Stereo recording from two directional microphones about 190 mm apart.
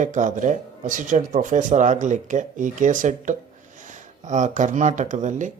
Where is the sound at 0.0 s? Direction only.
40° right (ahead or behind).